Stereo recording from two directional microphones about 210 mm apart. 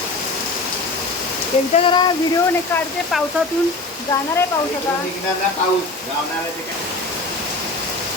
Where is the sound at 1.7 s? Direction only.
25° left (ahead or behind).